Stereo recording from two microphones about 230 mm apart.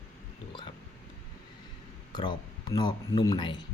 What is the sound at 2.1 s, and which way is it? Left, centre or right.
Speech, centre.